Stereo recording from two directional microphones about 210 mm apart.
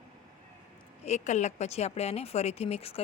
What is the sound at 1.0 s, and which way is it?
Speech, 35° left (ahead or behind).